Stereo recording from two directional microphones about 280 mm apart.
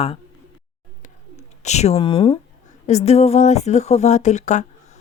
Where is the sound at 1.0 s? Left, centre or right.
Left.